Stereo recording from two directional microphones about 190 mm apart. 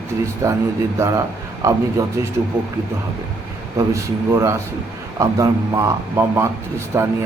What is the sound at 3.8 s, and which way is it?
Speech, 15° right (ahead or behind).